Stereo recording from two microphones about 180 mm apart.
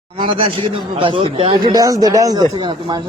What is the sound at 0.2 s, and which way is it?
Speech, 25° right (ahead or behind).